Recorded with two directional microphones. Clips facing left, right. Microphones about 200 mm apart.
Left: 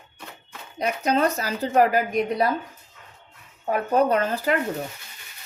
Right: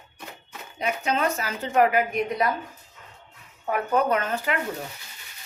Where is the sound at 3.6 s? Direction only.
30° left (ahead or behind).